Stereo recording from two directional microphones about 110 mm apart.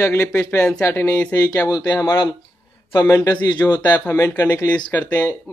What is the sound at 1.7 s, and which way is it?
Speech, 30° left (ahead or behind).